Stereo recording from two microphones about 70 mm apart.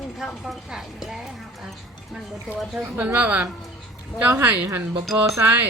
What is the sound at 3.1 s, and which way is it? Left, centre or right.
A woman's voice, right.